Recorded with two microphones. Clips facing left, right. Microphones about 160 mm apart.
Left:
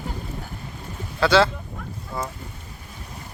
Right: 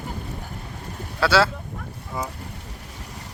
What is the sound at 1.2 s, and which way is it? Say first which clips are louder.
Speech: left 2 dB; 5° right (ahead or behind).